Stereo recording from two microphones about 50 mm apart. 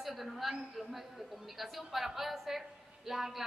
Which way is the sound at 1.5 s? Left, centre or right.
Centre.